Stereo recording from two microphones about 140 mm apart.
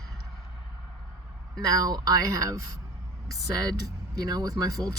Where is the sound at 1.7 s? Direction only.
30° right (ahead or behind).